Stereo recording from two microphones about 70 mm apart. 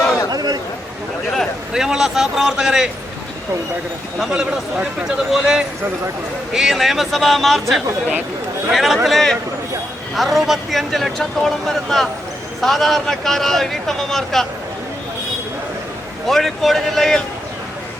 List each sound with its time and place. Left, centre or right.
0.3 s a sound: right
1.7 s a man's voice: centre
4.2 s a man's voice: centre
16.2 s speech: centre